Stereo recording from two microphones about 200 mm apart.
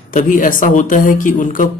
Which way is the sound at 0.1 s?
40° left (ahead or behind).